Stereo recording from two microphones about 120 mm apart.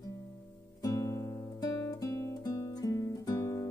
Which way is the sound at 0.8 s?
25° left (ahead or behind).